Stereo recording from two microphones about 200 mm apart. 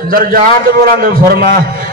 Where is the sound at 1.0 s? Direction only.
50° right (ahead or behind).